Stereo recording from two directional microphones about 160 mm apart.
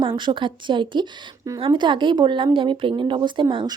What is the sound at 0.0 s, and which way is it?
A woman's voice, 30° right (ahead or behind).